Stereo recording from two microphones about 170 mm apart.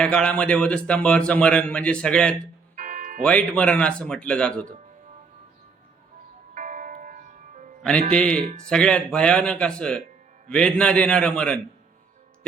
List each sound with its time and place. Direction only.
0.0 s speech: 5° left (ahead or behind)
2.7 s music: 50° right (ahead or behind)
3.2 s speech: 5° left (ahead or behind)
6.5 s music: 50° right (ahead or behind)
8.1 s a man's voice: 5° left (ahead or behind)